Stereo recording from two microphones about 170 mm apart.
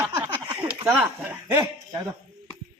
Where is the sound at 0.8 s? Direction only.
10° right (ahead or behind).